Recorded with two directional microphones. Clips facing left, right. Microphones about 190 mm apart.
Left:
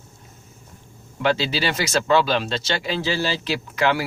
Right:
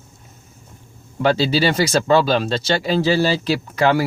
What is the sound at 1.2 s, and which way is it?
Speech, 35° right (ahead or behind).